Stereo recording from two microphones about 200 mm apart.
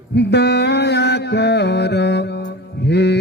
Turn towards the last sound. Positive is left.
turn(degrees=55)  # may be behind; listen again after turning